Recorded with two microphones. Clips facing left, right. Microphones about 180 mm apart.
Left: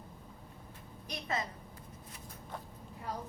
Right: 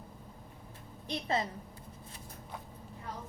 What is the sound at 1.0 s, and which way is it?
Speech, 30° right (ahead or behind).